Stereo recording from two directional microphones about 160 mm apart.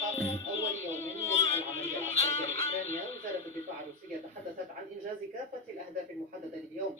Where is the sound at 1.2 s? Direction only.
45° left (ahead or behind).